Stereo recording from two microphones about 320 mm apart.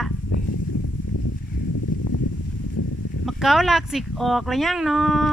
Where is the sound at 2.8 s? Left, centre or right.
Left.